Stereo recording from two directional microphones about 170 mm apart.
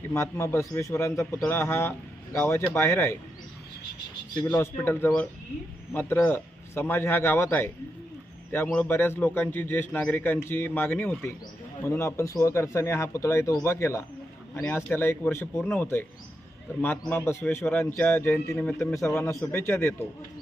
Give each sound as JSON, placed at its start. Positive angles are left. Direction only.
{"t": 0.1, "sound": "a man's voice", "side_deg": 15}
{"t": 4.4, "sound": "a man's voice", "side_deg": 10}
{"t": 17.1, "sound": "a man's voice", "side_deg": 15}